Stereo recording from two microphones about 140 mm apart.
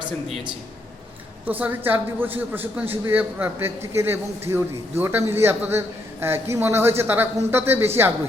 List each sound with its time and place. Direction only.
1.5 s a man's voice: 15° right (ahead or behind)